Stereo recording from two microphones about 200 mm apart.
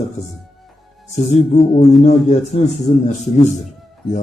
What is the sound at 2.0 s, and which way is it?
Speech, 35° left (ahead or behind).